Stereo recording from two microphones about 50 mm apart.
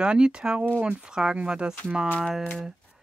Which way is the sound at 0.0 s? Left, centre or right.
Centre.